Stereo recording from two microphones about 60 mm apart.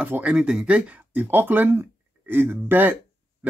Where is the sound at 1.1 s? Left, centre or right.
Right.